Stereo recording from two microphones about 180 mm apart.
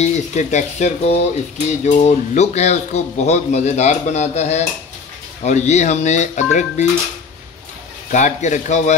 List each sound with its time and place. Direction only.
0.0 s speech: 40° left (ahead or behind)
8.1 s speech: 40° left (ahead or behind)